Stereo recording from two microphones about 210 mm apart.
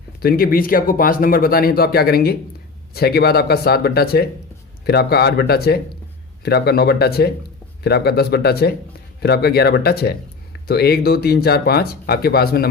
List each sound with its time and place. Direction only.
0.2 s speech: 45° left (ahead or behind)